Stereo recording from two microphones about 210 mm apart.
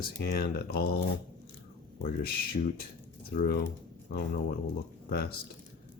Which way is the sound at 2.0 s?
45° left (ahead or behind).